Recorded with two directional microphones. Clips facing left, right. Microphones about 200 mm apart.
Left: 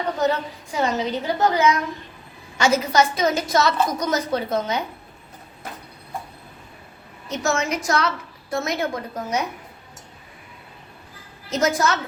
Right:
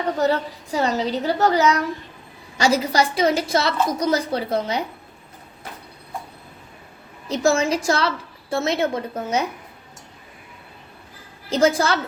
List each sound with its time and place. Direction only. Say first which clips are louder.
0.2 s a woman's voice: right 1 dB; 35° right (ahead or behind)
7.3 s a woman's voice: right 5 dB; 30° right (ahead or behind)
11.4 s a woman's voice: right 3 dB; 30° right (ahead or behind)